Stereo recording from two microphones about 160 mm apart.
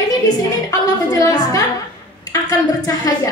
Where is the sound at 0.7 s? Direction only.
20° left (ahead or behind).